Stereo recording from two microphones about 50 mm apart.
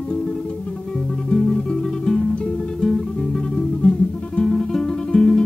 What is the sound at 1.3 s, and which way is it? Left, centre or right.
Music, centre.